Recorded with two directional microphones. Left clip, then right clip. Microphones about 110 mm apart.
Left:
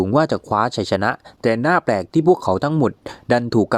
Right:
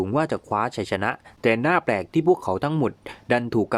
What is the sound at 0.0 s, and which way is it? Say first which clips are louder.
Speech: left 6 dB; 40° left (ahead or behind).